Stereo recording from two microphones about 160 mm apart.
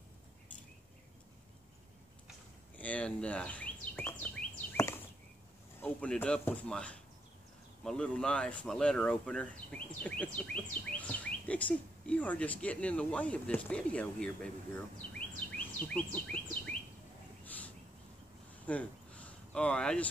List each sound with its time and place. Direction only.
2.8 s bird vocalization: 10° left (ahead or behind)
4.7 s chop: 20° left (ahead or behind)
5.8 s speech: 10° left (ahead or behind)
15.1 s bird: 10° left (ahead or behind)
18.7 s a sound: 10° left (ahead or behind)